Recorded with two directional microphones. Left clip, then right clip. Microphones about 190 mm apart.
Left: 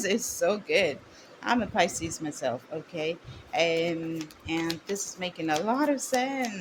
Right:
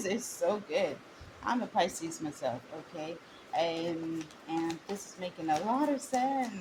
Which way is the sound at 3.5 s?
35° left (ahead or behind).